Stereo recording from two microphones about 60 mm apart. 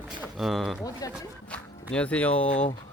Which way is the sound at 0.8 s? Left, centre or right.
Left.